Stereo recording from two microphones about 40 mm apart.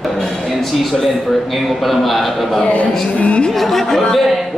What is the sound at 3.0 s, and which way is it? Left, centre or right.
Speech, left.